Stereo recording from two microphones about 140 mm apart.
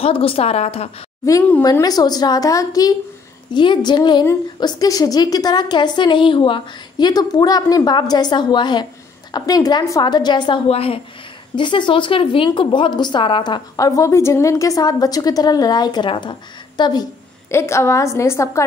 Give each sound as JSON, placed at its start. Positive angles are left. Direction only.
{"t": 0.0, "sound": "a woman's voice", "side_deg": 40}
{"t": 1.6, "sound": "a woman's voice", "side_deg": 25}
{"t": 10.7, "sound": "a woman's voice", "side_deg": 45}
{"t": 11.5, "sound": "a woman's voice", "side_deg": 35}
{"t": 17.5, "sound": "a woman's voice", "side_deg": 20}